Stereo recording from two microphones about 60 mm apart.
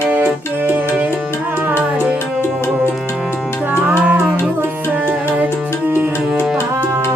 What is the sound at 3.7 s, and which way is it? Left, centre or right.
Music, right.